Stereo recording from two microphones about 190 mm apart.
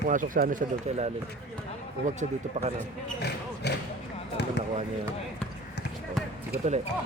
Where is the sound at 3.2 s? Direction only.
60° left (ahead or behind).